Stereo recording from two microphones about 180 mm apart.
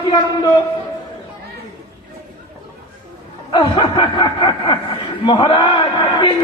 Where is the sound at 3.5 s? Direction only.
25° left (ahead or behind).